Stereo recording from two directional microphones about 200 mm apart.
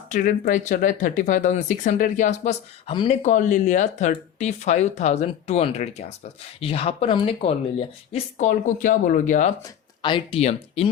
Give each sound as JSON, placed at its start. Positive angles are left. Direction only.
{"t": 0.1, "sound": "speech", "side_deg": 40}
{"t": 10.0, "sound": "speech", "side_deg": 25}